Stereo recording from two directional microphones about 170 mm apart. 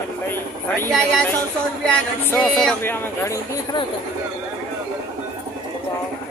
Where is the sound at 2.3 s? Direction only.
5° left (ahead or behind).